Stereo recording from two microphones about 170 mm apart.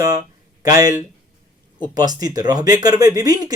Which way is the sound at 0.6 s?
20° right (ahead or behind).